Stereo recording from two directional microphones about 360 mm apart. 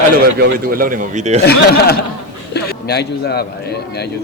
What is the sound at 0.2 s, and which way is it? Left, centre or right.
Speech, right.